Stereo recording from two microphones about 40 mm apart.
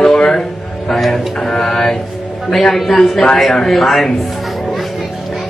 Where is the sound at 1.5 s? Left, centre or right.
Centre.